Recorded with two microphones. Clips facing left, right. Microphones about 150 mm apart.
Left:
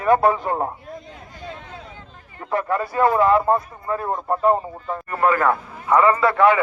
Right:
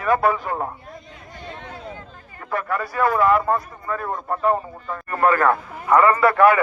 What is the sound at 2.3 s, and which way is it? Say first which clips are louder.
Speech: left 3 dB; 25° left (ahead or behind).